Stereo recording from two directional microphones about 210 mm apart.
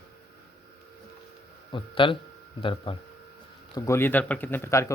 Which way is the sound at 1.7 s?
25° left (ahead or behind).